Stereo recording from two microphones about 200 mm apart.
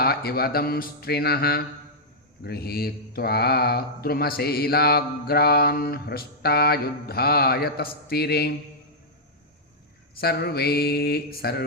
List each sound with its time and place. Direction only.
0.0 s speech: 50° left (ahead or behind)
10.2 s speech: 50° left (ahead or behind)